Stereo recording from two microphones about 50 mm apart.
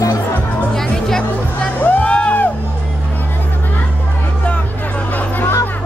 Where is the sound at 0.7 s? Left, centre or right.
Centre.